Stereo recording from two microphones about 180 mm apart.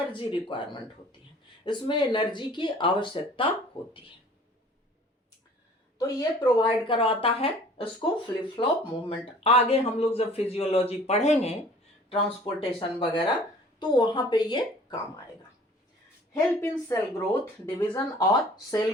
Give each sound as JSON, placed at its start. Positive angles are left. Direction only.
{"t": 0.1, "sound": "speech", "side_deg": 30}
{"t": 6.0, "sound": "speech", "side_deg": 20}
{"t": 16.3, "sound": "a woman's voice", "side_deg": 10}